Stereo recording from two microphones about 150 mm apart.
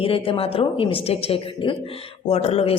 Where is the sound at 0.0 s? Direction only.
35° left (ahead or behind).